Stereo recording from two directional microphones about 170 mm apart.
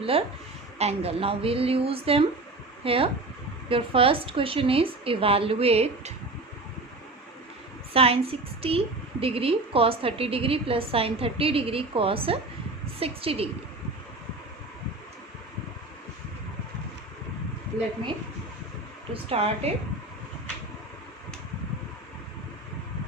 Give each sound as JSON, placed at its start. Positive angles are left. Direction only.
{"t": 0.0, "sound": "a woman's voice", "side_deg": -35}
{"t": 7.9, "sound": "a woman's voice", "side_deg": -35}
{"t": 19.1, "sound": "a woman's voice", "side_deg": -35}